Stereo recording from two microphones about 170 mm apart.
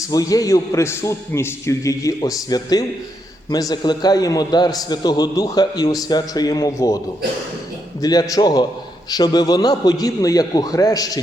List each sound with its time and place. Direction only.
0.1 s a man's voice: 20° left (ahead or behind)
8.0 s a man's voice: 20° left (ahead or behind)